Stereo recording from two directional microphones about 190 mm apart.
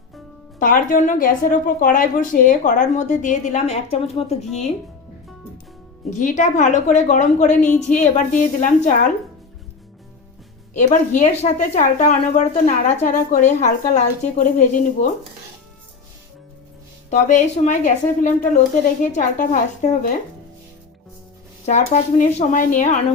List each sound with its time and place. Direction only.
0.6 s a woman's voice: 45° left (ahead or behind)
6.1 s a woman's voice: 40° left (ahead or behind)
10.8 s speech: 40° left (ahead or behind)
17.1 s speech: 40° left (ahead or behind)
21.7 s speech: 35° left (ahead or behind)